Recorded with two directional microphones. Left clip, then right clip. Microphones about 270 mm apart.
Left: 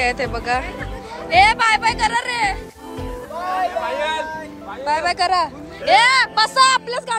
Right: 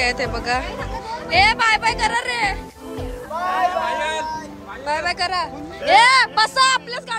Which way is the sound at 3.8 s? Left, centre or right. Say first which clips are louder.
Left 1 dB; centre.